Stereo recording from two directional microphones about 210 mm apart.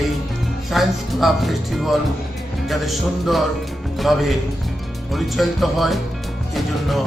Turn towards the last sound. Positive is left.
turn(degrees=0)  # may be behind; listen again after turning